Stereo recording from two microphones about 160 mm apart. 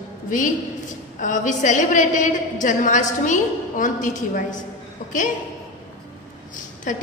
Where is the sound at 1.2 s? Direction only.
50° left (ahead or behind).